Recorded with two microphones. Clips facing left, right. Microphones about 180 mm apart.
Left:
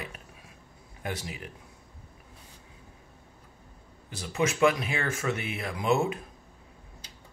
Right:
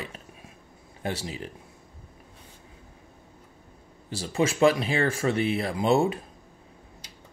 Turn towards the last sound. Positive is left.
turn(degrees=-30)  # may be behind; listen again after turning